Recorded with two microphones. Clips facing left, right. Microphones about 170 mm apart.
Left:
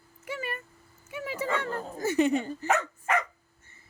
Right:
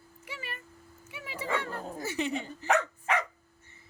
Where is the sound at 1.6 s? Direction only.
50° left (ahead or behind).